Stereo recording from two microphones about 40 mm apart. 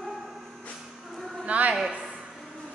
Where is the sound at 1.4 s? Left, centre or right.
Right.